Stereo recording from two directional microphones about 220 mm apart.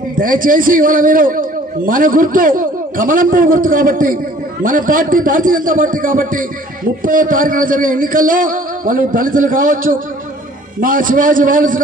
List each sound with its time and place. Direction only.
0.2 s a man's voice: 40° right (ahead or behind)